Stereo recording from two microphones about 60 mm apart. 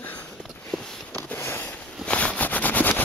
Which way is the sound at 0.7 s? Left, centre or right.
Centre.